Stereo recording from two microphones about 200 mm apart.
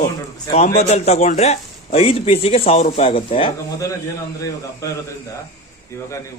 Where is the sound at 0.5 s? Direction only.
30° left (ahead or behind).